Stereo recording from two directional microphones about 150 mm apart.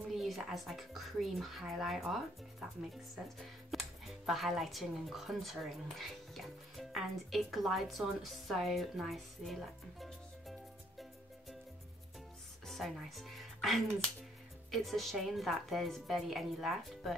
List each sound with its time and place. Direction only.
0.1 s a woman's voice: centre (ahead or behind)
3.3 s speech: centre (ahead or behind)
12.6 s a woman's voice: centre (ahead or behind)